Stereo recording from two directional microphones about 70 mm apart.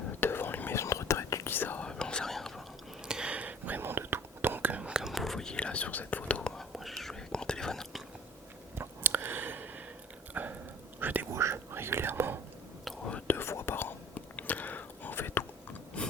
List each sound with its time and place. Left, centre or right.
0.2 s whispering: left
0.8 s whispering: left
1.5 s whispering: left
1.8 s whispering: centre
3.1 s whispering: centre
5.1 s whispering: centre
6.6 s whispering: centre
8.7 s a sound: right
11.0 s whispering: right
11.3 s whispering: right
13.2 s whispering: left
14.3 s whispering: left
16.0 s a sound: centre